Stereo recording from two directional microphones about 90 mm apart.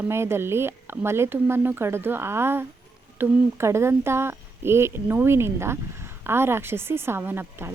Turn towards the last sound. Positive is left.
turn(degrees=-25)  # may be behind; listen again after turning